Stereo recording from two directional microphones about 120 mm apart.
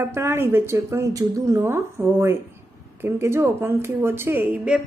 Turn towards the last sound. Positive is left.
turn(degrees=-15)  # may be behind; listen again after turning